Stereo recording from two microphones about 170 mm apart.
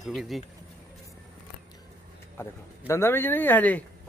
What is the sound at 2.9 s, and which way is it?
Speech, 15° left (ahead or behind).